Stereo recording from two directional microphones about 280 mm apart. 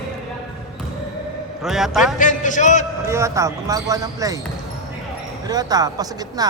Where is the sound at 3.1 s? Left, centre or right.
Centre.